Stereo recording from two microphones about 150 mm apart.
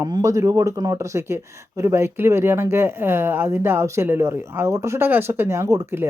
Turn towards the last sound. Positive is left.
turn(degrees=-20)  # may be behind; listen again after turning